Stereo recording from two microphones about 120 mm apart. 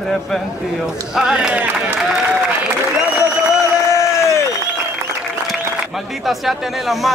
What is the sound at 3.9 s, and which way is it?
Crowd, 25° left (ahead or behind).